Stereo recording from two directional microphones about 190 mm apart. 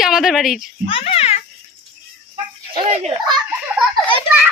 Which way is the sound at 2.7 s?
35° right (ahead or behind).